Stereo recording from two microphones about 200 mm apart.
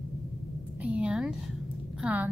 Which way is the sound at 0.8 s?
5° right (ahead or behind).